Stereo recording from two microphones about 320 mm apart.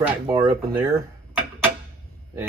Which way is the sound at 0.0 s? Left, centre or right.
Centre.